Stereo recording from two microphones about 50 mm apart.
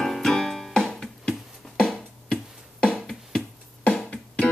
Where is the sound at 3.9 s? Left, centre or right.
Left.